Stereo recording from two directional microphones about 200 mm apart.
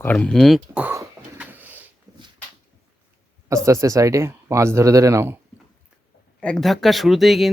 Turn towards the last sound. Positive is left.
turn(degrees=0)  # may be behind; listen again after turning